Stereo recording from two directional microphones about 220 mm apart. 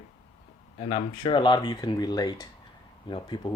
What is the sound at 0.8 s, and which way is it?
Speech, 25° left (ahead or behind).